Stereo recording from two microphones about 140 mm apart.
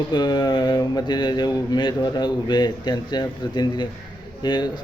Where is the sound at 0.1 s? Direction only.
30° left (ahead or behind).